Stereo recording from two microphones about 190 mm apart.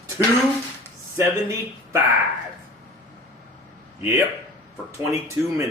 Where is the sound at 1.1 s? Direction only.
15° right (ahead or behind).